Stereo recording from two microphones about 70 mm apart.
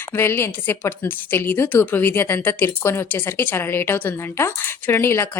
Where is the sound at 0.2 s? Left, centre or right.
Left.